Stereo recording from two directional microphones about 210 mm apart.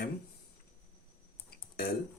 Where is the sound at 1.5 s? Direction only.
45° left (ahead or behind).